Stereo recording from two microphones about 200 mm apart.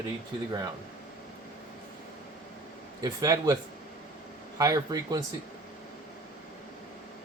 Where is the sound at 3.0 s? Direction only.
15° right (ahead or behind).